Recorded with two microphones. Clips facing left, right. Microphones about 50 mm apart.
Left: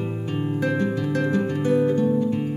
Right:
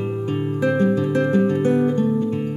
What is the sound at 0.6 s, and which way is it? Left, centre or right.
Music, right.